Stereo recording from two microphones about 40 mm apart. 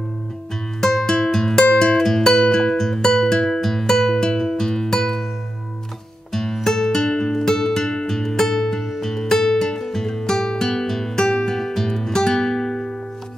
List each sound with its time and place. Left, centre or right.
0.7 s music: centre
3.4 s music: centre
6.3 s music: centre